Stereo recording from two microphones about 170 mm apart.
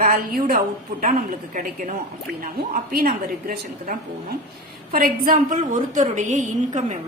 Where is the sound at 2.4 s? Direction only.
55° right (ahead or behind).